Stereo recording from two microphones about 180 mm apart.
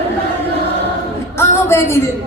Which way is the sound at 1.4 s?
15° left (ahead or behind).